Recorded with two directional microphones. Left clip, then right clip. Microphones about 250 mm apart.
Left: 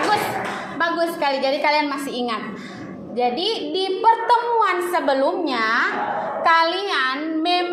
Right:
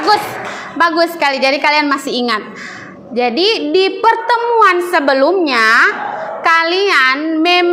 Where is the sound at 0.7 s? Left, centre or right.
Right.